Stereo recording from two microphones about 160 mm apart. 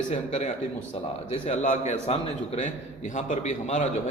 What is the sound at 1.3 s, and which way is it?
Speech, 45° left (ahead or behind).